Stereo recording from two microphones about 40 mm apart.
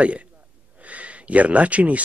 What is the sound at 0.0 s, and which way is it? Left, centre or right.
Speech, right.